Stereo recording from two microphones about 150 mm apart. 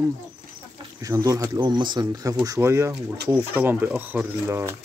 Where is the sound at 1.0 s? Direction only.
20° right (ahead or behind).